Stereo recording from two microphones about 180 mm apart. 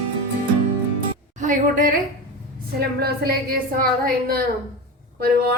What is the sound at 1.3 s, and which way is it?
Speech, 45° right (ahead or behind).